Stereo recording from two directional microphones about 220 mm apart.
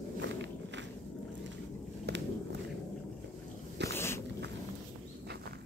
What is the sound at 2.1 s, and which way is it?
Walk, 50° right (ahead or behind).